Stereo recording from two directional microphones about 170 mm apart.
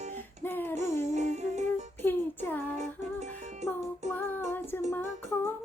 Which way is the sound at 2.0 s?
10° left (ahead or behind).